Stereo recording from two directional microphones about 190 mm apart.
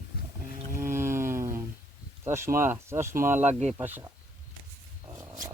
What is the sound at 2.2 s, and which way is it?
Speech, 15° right (ahead or behind).